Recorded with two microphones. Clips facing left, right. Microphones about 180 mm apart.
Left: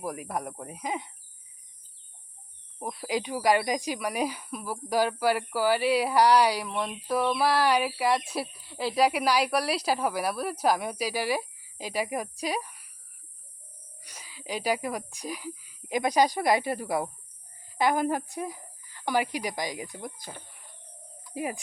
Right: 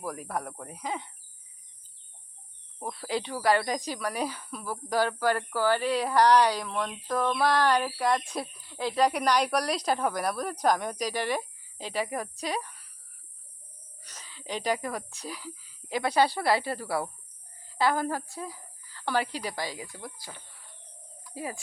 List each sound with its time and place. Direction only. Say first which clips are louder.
0.0 s speech: left 1 dB; 10° left (ahead or behind)
2.7 s speech: left 1 dB; 15° left (ahead or behind)
14.0 s speech: left 1 dB; 10° left (ahead or behind)
21.3 s speech: left 4 dB; 20° left (ahead or behind)